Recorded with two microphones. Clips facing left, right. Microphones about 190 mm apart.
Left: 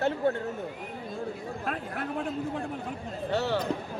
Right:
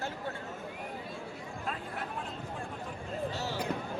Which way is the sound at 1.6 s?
65° left (ahead or behind).